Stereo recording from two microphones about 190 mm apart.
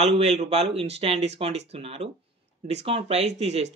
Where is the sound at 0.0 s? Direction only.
35° right (ahead or behind).